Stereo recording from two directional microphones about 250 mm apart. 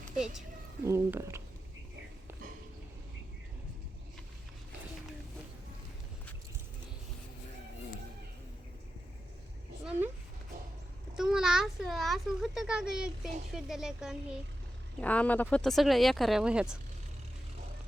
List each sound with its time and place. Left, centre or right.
0.9 s speech: centre
11.2 s a child's voice: centre